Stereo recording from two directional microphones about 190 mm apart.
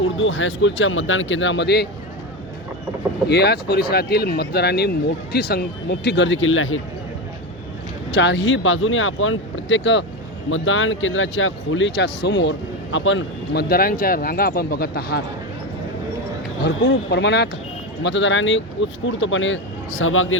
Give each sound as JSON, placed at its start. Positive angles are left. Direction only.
{"t": 0.0, "sound": "speech", "side_deg": 90}
{"t": 3.2, "sound": "speech", "side_deg": 60}
{"t": 8.1, "sound": "speech", "side_deg": 75}
{"t": 10.5, "sound": "speech", "side_deg": 90}
{"t": 16.6, "sound": "speech", "side_deg": 65}